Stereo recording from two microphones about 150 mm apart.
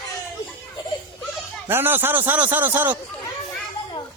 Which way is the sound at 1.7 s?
15° right (ahead or behind).